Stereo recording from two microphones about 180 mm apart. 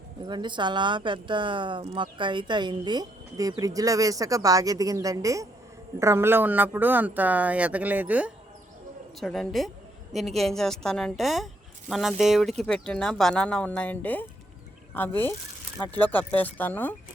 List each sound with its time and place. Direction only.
0.3 s a man's voice: 25° right (ahead or behind); by 16.9 s 10° left (ahead or behind)